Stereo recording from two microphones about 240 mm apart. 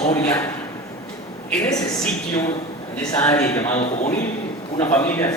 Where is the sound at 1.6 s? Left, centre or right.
Centre.